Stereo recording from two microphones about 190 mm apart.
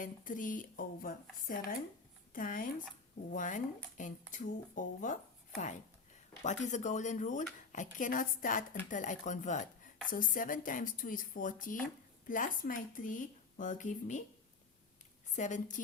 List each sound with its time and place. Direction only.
0.0 s speech: 45° left (ahead or behind)
6.4 s speech: 40° left (ahead or behind)
15.4 s speech: 40° left (ahead or behind)